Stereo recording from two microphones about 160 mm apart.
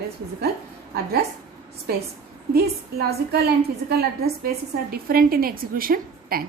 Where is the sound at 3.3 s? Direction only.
80° right.